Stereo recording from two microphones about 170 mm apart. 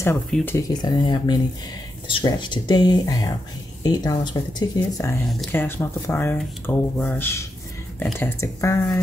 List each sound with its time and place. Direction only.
0.6 s speech: 25° left (ahead or behind)